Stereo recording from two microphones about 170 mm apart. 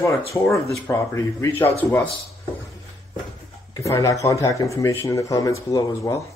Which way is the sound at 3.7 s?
20° left (ahead or behind).